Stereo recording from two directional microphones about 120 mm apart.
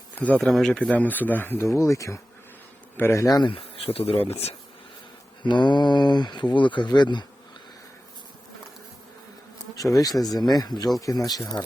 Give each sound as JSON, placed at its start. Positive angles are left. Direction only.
{"t": 0.2, "sound": "speech", "side_deg": 10}
{"t": 3.5, "sound": "speech", "side_deg": 50}
{"t": 5.5, "sound": "speech", "side_deg": 40}
{"t": 9.7, "sound": "speech", "side_deg": 30}